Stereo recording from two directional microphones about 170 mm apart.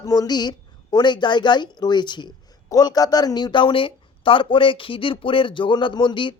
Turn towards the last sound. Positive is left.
turn(degrees=30)  # may be behind; listen again after turning